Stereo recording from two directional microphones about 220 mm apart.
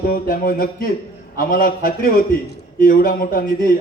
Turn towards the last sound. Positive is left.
turn(degrees=40)  # may be behind; listen again after turning